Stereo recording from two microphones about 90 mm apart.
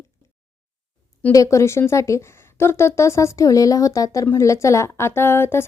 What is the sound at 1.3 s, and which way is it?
Speech, 35° left (ahead or behind).